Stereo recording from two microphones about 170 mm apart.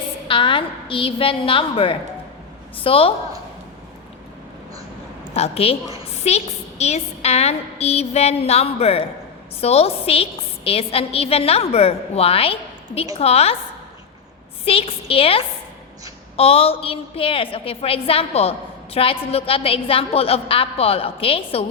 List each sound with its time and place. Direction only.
0.3 s a woman's voice: 30° left (ahead or behind)
5.3 s a woman's voice: 35° left (ahead or behind)
14.6 s a woman's voice: 35° left (ahead or behind)